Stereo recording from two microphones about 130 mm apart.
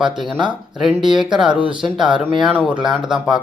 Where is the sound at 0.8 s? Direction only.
5° right (ahead or behind).